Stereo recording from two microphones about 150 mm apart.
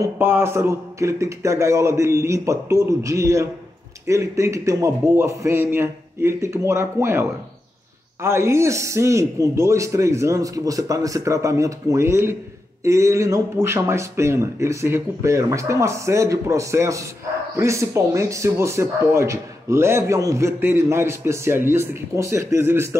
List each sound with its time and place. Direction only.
0.0 s a man's voice: 15° right (ahead or behind)